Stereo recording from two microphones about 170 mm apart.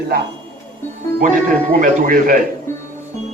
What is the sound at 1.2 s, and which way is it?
Speech, 55° right (ahead or behind).